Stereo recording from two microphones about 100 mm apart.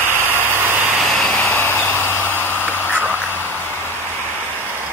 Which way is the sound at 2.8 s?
20° right (ahead or behind).